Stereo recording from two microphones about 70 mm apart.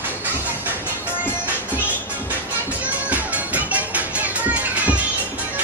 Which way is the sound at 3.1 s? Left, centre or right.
Right.